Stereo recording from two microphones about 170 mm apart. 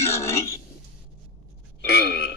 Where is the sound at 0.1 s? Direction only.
15° left (ahead or behind).